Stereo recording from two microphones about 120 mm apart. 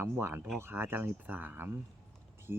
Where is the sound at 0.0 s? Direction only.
20° right (ahead or behind).